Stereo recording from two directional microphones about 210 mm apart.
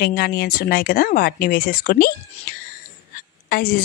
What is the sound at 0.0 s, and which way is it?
A woman's voice, 50° left (ahead or behind).